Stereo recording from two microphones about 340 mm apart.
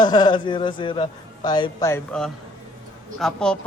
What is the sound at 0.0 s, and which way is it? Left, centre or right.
A man's voice, centre.